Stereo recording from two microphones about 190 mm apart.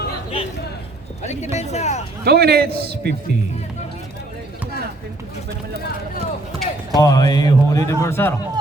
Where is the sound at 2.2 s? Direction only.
55° right (ahead or behind).